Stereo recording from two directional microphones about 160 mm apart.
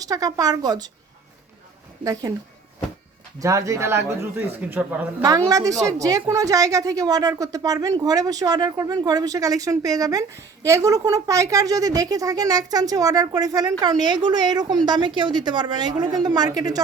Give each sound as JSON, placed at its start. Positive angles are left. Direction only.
{"t": 0.0, "sound": "a woman's voice", "side_deg": -25}
{"t": 3.4, "sound": "a man's voice", "side_deg": -20}